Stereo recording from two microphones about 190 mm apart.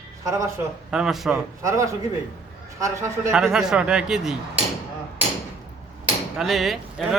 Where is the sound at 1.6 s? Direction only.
15° right (ahead or behind).